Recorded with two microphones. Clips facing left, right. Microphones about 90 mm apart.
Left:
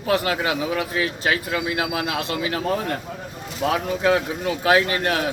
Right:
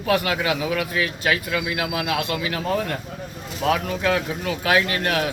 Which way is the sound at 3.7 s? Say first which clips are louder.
Left 2 dB; 25° left (ahead or behind).